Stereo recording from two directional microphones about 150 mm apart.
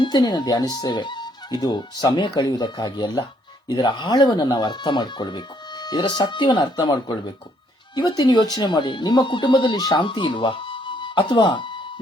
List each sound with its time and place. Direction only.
0.0 s speech: 30° left (ahead or behind)